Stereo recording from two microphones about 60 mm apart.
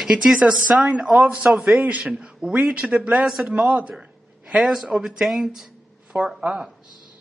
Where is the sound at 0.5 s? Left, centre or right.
Centre.